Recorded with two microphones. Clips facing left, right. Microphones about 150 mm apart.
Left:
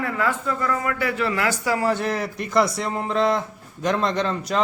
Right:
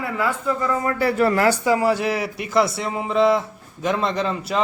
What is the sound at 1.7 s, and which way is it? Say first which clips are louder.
A man's voice: right 3 dB; 15° right (ahead or behind).